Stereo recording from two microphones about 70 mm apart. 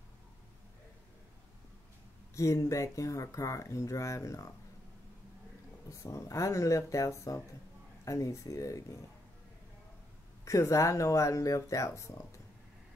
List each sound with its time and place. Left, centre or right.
2.3 s speech: left
5.9 s speech: left
10.4 s speech: left